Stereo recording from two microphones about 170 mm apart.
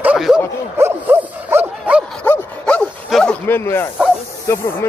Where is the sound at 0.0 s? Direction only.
5° right (ahead or behind).